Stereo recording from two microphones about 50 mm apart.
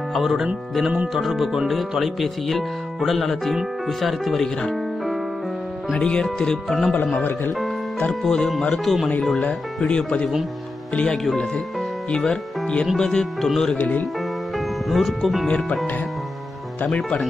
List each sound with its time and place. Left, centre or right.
0.1 s speech: centre
5.9 s speech: centre
8.2 s speech: centre
13.7 s speech: left
14.9 s speech: centre
16.8 s speech: left